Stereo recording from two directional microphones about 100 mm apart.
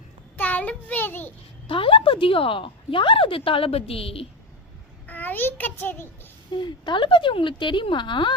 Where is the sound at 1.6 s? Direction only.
60° left (ahead or behind).